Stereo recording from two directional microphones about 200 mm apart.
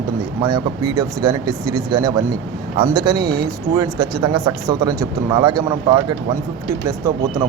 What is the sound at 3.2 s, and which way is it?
Speech, 50° right (ahead or behind).